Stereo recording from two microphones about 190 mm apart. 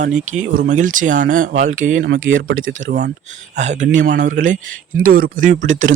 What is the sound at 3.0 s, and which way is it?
Speech, 40° right (ahead or behind).